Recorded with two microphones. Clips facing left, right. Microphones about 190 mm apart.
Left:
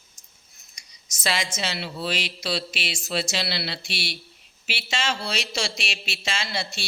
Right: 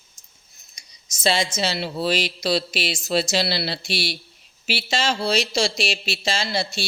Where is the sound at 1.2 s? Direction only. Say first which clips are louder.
Right 6 dB; 30° right (ahead or behind).